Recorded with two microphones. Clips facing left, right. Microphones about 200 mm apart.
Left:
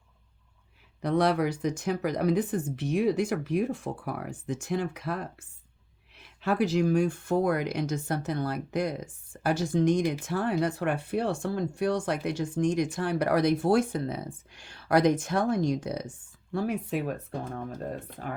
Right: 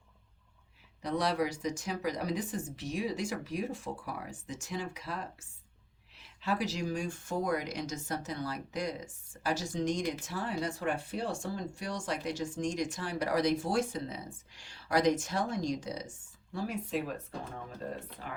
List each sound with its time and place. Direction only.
1.0 s speech: 55° left (ahead or behind)